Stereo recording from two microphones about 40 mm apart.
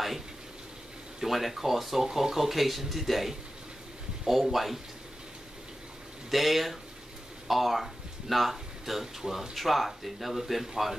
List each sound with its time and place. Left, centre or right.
1.2 s speech: centre
6.3 s speech: centre